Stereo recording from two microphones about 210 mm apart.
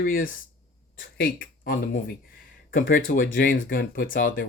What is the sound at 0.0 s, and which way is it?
Speech, 40° left (ahead or behind).